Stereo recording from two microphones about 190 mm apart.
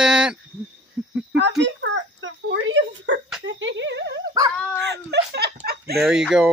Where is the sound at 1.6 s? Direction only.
75° right (ahead or behind); by 5.9 s 60° right (ahead or behind).